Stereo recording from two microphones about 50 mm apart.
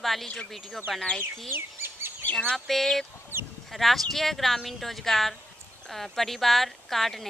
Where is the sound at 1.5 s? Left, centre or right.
Right.